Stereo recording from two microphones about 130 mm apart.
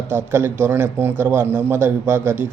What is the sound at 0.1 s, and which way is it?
A man's voice, 20° right (ahead or behind).